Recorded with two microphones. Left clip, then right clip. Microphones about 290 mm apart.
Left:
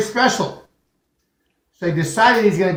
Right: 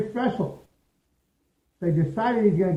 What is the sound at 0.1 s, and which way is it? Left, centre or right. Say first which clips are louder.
Speech: left 10 dB; centre.